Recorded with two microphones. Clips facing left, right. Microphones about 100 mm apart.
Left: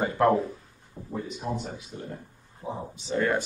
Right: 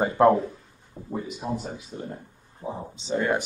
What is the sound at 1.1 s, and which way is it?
Speech, 5° right (ahead or behind).